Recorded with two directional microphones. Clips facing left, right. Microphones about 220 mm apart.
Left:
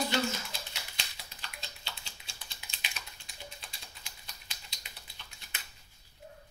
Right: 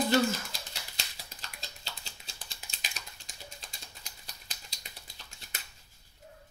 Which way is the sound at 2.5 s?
40° right (ahead or behind).